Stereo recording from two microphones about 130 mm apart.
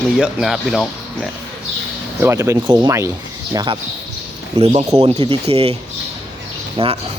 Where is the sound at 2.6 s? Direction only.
35° right (ahead or behind).